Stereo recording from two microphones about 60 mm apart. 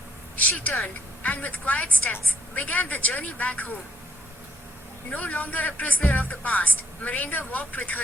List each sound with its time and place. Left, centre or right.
0.6 s speech: left
5.1 s speech: left